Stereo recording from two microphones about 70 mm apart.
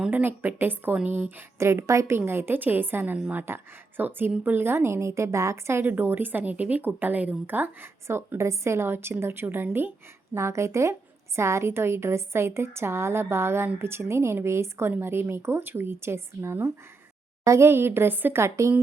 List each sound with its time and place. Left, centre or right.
0.1 s speech: right
1.5 s a woman's voice: right
5.8 s speech: right
8.0 s a woman's voice: right
10.3 s a woman's voice: right
18.4 s a woman's voice: right